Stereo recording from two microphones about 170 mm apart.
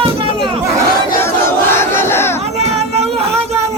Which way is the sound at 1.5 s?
15° left (ahead or behind).